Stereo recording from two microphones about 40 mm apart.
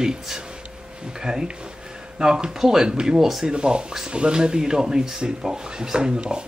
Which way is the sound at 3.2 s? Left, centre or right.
Centre.